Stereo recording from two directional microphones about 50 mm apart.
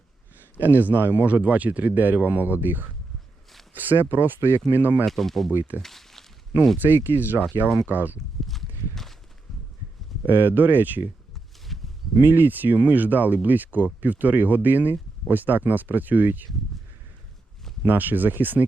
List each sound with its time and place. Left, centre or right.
0.6 s speech: right
4.4 s speech: right
4.7 s speech: right
5.0 s speech: centre
5.5 s speech: right
5.8 s a sound: centre
6.7 s speech: right
8.4 s walk: centre
10.2 s speech: right
11.7 s a sound: centre
12.2 s speech: right
17.8 s speech: right